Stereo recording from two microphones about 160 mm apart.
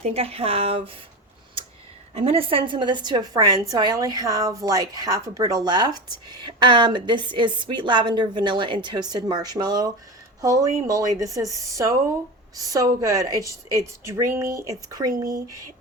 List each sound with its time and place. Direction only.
0.0 s speech: 40° right (ahead or behind)
2.1 s a woman's voice: 35° right (ahead or behind); by 15.1 s 20° right (ahead or behind)